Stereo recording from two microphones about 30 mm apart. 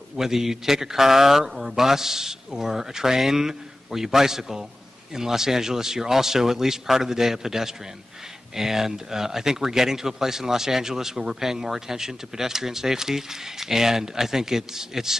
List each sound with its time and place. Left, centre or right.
0.1 s speech: centre